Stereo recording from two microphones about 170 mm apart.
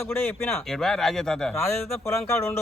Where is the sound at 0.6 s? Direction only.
Centre (ahead or behind).